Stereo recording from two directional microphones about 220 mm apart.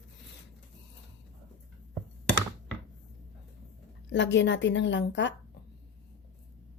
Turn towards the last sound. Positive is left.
turn(degrees=55)  # may be behind; listen again after turning